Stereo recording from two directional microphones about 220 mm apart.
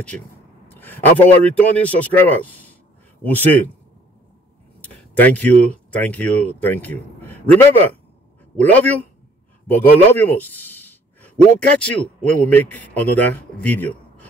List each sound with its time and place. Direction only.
0.7 s a man's voice: 10° left (ahead or behind)
4.8 s a sound: 5° left (ahead or behind)
5.9 s a man's voice: 5° left (ahead or behind)